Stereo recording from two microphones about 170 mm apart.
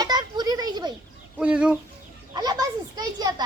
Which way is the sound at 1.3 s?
5° right (ahead or behind).